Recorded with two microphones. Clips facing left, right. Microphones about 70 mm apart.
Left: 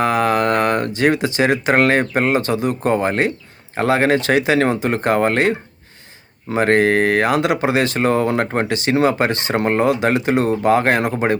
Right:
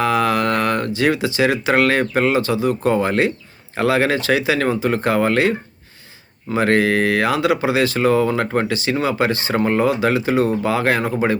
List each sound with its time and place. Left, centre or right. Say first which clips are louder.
0.0 s speech: left 1 dB; left